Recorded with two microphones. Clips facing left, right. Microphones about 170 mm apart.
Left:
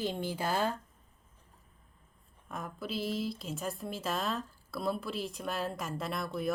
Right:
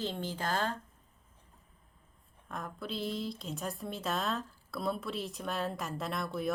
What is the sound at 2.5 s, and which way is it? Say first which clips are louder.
Speech: left 1 dB; 5° left (ahead or behind).